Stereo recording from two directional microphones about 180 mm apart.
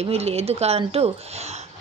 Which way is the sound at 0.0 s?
35° right (ahead or behind).